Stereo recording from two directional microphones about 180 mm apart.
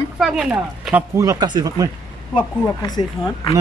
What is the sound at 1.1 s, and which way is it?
Speech, 15° right (ahead or behind).